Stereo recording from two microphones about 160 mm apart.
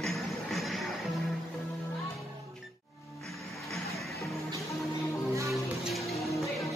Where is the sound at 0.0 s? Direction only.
Centre (ahead or behind).